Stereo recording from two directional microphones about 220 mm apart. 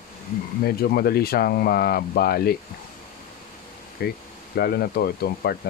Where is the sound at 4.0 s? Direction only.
45° left (ahead or behind).